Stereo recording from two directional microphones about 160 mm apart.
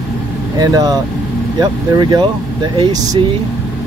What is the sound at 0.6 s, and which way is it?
Speech, 20° right (ahead or behind).